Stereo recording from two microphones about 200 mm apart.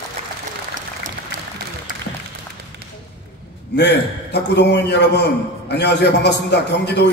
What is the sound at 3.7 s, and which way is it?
A man's voice, 55° left (ahead or behind).